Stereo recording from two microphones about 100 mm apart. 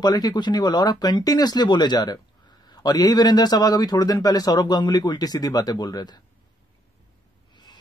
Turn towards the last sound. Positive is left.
turn(degrees=45)  # may be behind; listen again after turning